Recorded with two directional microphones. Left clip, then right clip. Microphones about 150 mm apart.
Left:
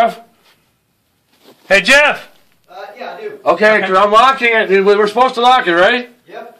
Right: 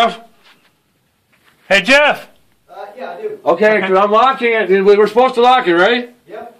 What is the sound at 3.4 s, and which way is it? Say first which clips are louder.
A man's voice: left 1 dB; 10° right (ahead or behind).